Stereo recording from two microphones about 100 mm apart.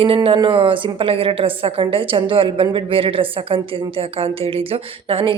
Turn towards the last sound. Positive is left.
turn(degrees=-65)  # may be behind; listen again after turning